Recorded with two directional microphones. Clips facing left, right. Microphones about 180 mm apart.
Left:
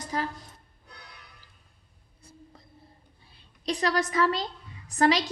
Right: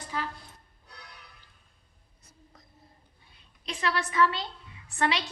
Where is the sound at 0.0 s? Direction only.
40° left (ahead or behind).